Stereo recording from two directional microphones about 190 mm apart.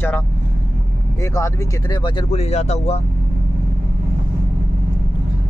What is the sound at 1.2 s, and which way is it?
Speech, 15° left (ahead or behind).